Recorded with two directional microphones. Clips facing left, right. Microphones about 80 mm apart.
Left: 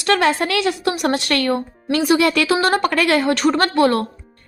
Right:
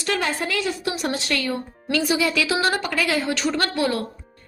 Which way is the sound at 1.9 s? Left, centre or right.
Left.